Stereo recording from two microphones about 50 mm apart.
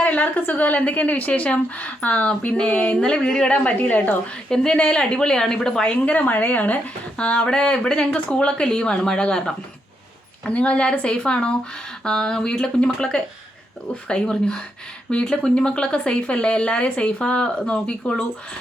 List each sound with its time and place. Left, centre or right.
0.0 s a woman's voice: left
3.8 s speech: left
4.4 s speech: centre
5.8 s speech: left
7.2 s speech: left